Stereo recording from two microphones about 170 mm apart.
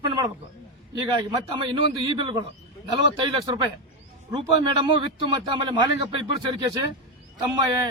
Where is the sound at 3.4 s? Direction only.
25° right (ahead or behind).